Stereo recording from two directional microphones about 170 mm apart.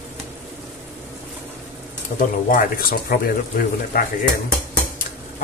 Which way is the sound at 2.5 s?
60° left (ahead or behind).